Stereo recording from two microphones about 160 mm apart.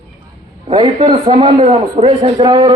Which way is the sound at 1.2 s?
40° right (ahead or behind).